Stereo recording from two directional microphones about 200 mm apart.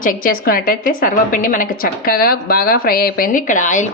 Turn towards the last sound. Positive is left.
turn(degrees=40)  # may be behind; listen again after turning